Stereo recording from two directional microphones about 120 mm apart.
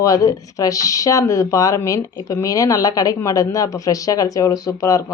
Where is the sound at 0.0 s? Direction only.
30° left (ahead or behind).